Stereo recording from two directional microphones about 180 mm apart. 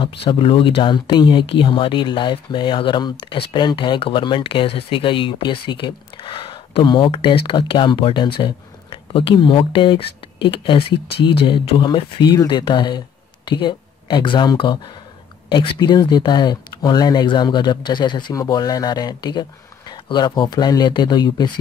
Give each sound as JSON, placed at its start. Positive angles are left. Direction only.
{"t": 0.0, "sound": "speech", "side_deg": 30}